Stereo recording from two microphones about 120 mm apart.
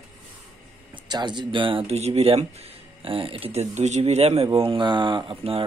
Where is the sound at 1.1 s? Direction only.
40° right (ahead or behind).